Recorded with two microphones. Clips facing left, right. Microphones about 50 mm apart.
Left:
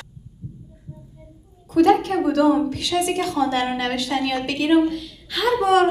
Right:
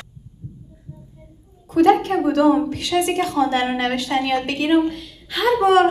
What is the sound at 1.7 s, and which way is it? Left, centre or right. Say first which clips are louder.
A woman's voice: right 1 dB; right.